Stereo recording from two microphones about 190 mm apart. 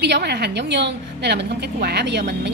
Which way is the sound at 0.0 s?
60° right (ahead or behind).